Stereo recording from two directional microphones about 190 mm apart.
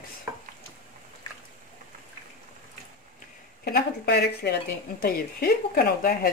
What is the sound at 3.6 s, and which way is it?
Speech, 55° left (ahead or behind).